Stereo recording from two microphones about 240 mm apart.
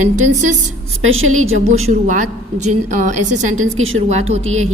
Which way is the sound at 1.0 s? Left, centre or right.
Right.